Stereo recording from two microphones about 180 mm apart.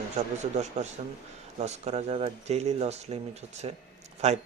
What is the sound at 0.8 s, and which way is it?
Speech, 40° right (ahead or behind).